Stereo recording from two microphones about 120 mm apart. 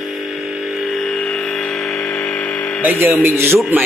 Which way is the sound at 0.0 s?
Centre (ahead or behind).